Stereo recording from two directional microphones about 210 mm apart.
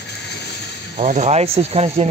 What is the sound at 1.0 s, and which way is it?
Speech, 35° right (ahead or behind).